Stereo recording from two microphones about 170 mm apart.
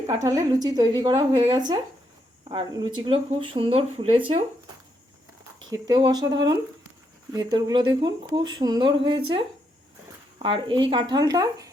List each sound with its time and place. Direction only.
0.2 s speech: 20° right (ahead or behind)
5.7 s speech: 25° right (ahead or behind)